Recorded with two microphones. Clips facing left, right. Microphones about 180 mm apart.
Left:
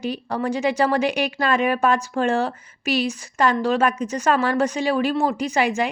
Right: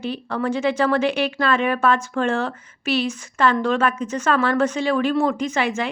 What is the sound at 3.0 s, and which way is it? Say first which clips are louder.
Speech: even; 10° left (ahead or behind).